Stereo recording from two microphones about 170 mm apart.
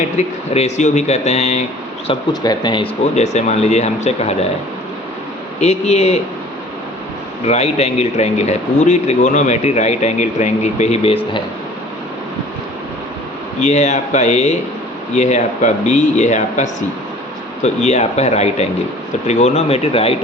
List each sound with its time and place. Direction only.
0.2 s speech: 40° left (ahead or behind)
2.3 s speech: 25° left (ahead or behind); by 4.4 s 40° left (ahead or behind)
5.5 s speech: 40° left (ahead or behind)
7.4 s speech: 40° left (ahead or behind)
13.6 s speech: 45° left (ahead or behind)